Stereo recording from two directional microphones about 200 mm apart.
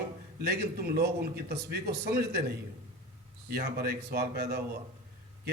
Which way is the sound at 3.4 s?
55° right (ahead or behind).